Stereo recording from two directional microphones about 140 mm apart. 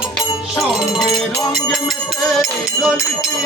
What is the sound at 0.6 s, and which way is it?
Music, centre (ahead or behind).